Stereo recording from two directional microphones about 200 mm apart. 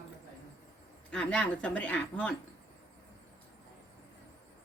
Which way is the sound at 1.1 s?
5° left (ahead or behind).